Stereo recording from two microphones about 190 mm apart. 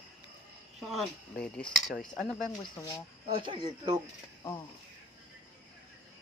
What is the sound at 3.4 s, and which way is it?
Speech, 25° right (ahead or behind).